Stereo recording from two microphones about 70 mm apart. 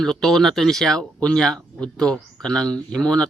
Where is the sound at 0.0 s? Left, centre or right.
Centre.